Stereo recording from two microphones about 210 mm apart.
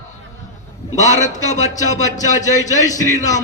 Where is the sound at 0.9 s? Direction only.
35° left (ahead or behind).